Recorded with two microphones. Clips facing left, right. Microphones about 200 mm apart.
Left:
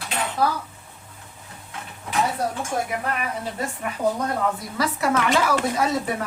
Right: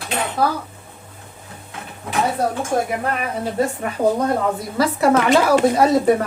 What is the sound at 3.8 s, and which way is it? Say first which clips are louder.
Speech: right 2 dB; 40° right (ahead or behind).